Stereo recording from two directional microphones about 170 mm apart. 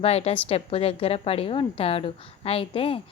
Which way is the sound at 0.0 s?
35° left (ahead or behind).